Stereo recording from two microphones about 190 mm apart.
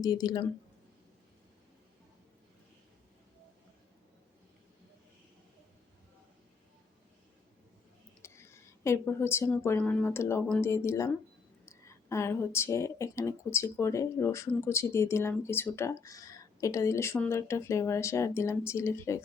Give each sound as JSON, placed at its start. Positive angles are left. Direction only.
{"t": 0.0, "sound": "speech", "side_deg": 20}
{"t": 8.2, "sound": "a sound", "side_deg": 15}
{"t": 9.6, "sound": "a woman's voice", "side_deg": 5}